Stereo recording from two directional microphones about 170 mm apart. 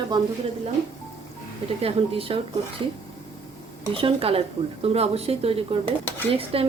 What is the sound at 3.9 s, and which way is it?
A woman's voice, 35° right (ahead or behind).